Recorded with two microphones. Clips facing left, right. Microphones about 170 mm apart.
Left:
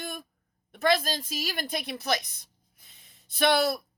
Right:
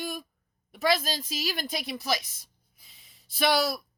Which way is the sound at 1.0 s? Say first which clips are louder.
Even; 50° left (ahead or behind).